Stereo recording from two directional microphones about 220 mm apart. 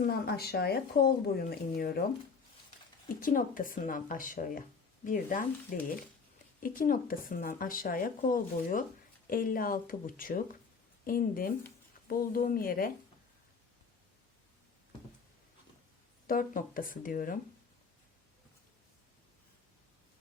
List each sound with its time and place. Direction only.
0.0 s speech: 45° left (ahead or behind)
3.2 s speech: 40° left (ahead or behind)
16.2 s speech: 40° left (ahead or behind)